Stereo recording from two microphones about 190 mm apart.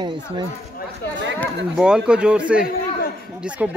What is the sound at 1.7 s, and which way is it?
Speech, 5° right (ahead or behind).